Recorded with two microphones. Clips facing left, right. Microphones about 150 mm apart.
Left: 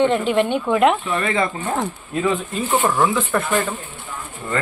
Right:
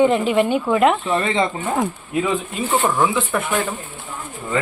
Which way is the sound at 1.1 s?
25° right (ahead or behind).